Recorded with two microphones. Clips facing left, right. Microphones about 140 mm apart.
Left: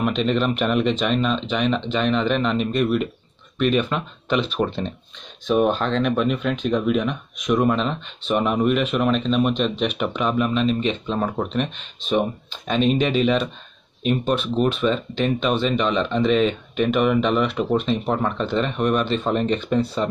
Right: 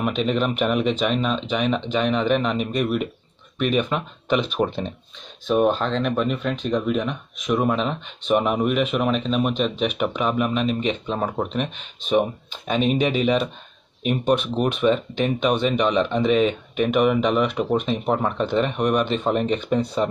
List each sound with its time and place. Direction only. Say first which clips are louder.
0.0 s speech: left 1 dB; 10° right (ahead or behind)
5.6 s speech: even; centre (ahead or behind)